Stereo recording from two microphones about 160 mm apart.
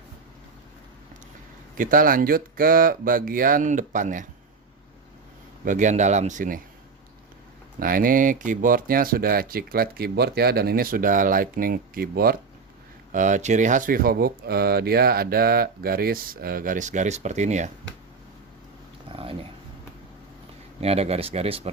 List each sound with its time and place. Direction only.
1.8 s speech: 60° right (ahead or behind)
5.6 s speech: 50° right (ahead or behind)
7.8 s speech: 60° right (ahead or behind)
13.1 s speech: 50° right (ahead or behind)
19.1 s dog: 35° right (ahead or behind)
20.8 s speech: 40° right (ahead or behind)